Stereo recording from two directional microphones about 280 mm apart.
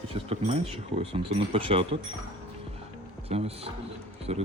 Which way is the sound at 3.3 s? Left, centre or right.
Right.